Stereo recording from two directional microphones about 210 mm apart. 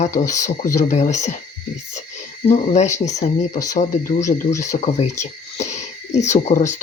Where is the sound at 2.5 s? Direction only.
35° left (ahead or behind).